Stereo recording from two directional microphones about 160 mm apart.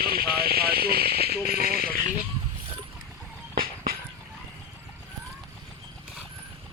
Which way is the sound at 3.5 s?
65° right (ahead or behind).